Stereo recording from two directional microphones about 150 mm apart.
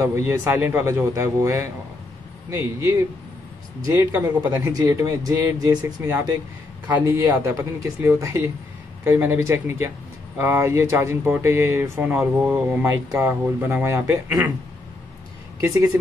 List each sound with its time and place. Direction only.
0.0 s a man's voice: 20° right (ahead or behind)
7.1 s a man's voice: 20° right (ahead or behind)